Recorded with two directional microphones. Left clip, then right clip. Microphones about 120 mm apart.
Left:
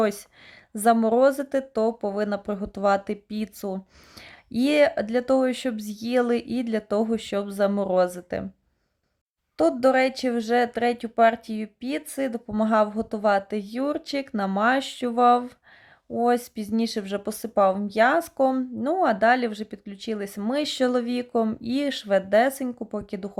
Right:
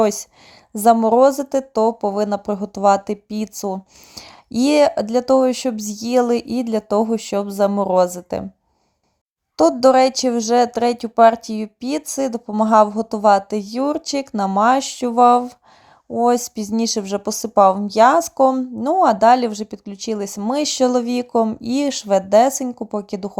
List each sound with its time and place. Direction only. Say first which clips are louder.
0.0 s a woman's voice: right 7 dB; 25° right (ahead or behind)
9.6 s speech: right 7 dB; 35° right (ahead or behind)